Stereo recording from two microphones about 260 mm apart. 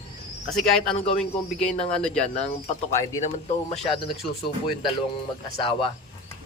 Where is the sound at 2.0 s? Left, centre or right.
Centre.